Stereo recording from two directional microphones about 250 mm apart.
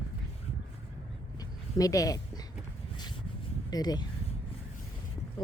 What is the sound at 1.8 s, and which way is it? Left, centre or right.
Speech, centre.